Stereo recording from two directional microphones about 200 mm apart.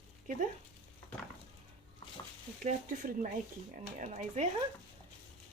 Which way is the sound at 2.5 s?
40° right (ahead or behind).